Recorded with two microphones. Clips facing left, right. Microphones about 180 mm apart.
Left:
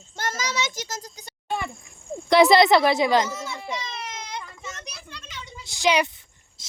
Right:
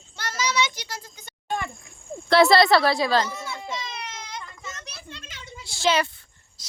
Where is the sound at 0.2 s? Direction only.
45° left (ahead or behind).